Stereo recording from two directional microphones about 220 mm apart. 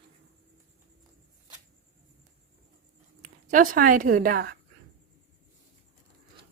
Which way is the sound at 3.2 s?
35° right (ahead or behind).